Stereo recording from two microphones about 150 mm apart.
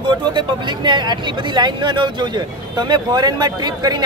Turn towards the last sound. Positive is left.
turn(degrees=-30)  # may be behind; listen again after turning